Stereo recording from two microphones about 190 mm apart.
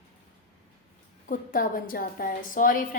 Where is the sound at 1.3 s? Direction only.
45° left (ahead or behind).